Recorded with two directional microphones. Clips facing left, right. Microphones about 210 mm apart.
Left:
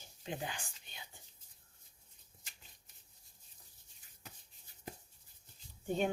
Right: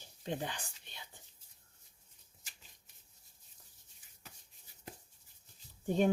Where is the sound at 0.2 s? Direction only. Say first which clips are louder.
Right 3 dB; 35° right (ahead or behind).